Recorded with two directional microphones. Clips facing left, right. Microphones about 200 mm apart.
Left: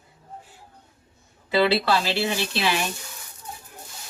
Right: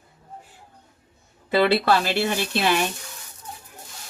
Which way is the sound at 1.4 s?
50° right (ahead or behind).